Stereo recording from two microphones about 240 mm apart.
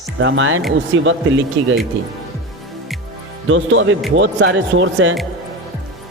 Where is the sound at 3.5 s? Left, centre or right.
Right.